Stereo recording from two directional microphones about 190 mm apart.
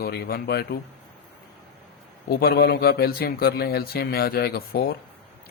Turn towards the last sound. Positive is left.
turn(degrees=55)  # may be behind; listen again after turning